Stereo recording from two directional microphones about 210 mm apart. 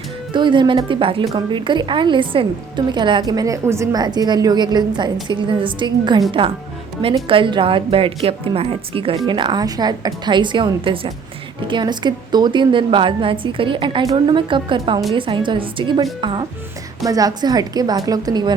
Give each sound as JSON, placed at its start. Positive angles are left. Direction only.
{"t": 0.3, "sound": "a woman's voice", "side_deg": -20}